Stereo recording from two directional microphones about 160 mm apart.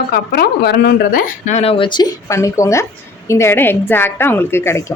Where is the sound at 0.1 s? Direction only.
80° left.